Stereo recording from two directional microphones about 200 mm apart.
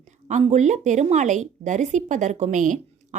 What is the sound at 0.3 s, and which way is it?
A woman's voice, 35° right (ahead or behind).